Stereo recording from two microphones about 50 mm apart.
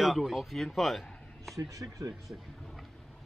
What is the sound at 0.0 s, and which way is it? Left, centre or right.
Speech, centre.